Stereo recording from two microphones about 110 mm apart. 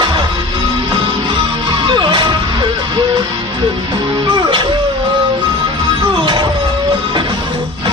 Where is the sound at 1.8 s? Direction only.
45° right (ahead or behind).